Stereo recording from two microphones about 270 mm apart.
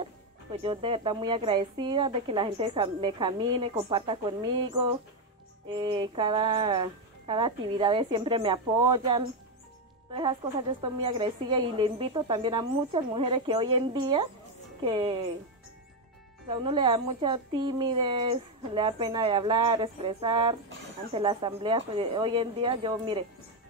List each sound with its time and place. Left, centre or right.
0.0 s speech: right
5.8 s speech: centre
16.4 s speech: centre